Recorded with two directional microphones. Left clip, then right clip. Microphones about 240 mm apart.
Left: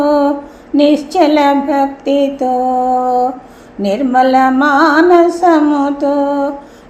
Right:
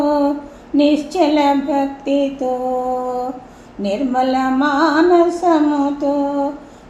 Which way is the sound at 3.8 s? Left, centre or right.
Left.